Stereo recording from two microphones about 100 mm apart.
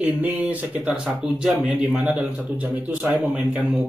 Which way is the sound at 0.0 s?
15° right (ahead or behind).